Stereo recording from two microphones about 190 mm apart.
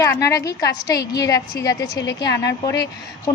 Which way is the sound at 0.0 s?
15° left (ahead or behind).